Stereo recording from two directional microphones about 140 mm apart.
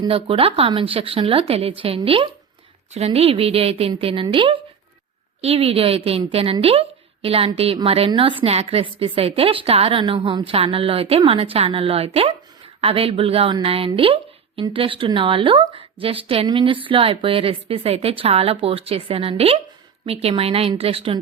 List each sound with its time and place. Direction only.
0.1 s a woman's voice: 40° right (ahead or behind)